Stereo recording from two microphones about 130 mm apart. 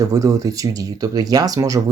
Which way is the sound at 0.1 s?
25° right (ahead or behind).